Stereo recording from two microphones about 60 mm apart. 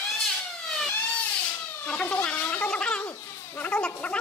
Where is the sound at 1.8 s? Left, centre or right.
Left.